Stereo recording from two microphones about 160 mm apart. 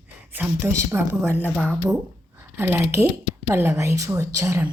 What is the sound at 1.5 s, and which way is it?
Speech, 5° left (ahead or behind).